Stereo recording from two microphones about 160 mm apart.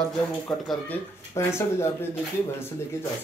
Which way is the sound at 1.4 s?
15° left (ahead or behind).